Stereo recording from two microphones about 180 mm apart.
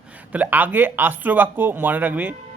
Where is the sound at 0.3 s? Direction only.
10° right (ahead or behind).